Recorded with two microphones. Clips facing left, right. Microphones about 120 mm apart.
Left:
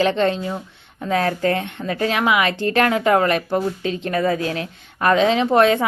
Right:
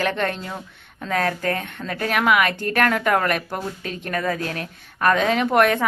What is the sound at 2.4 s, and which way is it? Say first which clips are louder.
Speech: left 4 dB; 45° right (ahead or behind).